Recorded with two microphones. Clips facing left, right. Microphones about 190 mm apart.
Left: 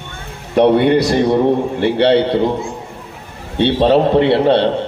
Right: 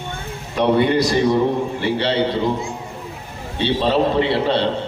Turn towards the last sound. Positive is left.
turn(degrees=60)  # may be behind; listen again after turning